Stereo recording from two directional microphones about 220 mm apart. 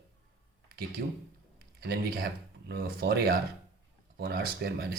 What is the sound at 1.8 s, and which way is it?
Speech, 45° right (ahead or behind).